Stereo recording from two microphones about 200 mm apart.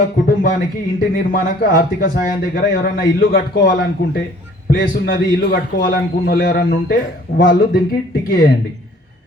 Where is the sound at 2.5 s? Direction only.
60° left (ahead or behind); by 8.5 s 45° left (ahead or behind).